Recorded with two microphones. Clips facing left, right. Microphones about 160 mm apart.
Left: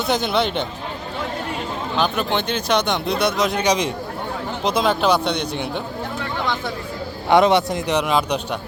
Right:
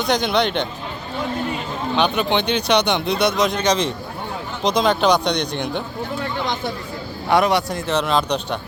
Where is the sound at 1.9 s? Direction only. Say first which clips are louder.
Right 2 dB; centre (ahead or behind).